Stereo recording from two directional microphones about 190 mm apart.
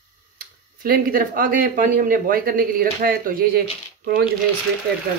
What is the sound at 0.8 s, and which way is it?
Speech, 50° right (ahead or behind).